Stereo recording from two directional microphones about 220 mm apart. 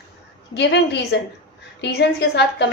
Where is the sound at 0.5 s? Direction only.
50° left (ahead or behind).